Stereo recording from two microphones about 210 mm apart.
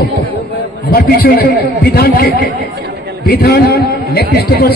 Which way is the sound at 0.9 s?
45° left (ahead or behind).